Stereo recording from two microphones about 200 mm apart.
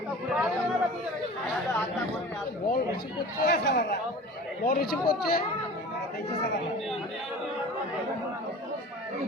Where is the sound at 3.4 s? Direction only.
50° left (ahead or behind).